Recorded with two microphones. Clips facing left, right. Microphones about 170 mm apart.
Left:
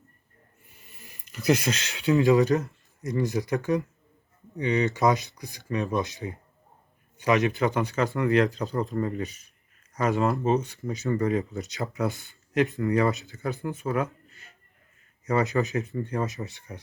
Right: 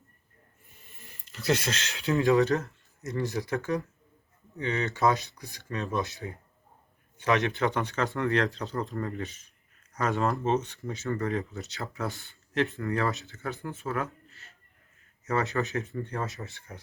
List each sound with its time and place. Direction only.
1.3 s speech: 15° left (ahead or behind)
7.2 s speech: 5° left (ahead or behind)